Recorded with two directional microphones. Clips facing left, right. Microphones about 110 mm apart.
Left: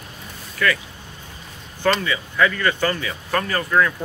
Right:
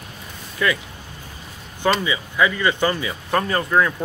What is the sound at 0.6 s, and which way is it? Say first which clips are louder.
Speech: even; 20° right (ahead or behind).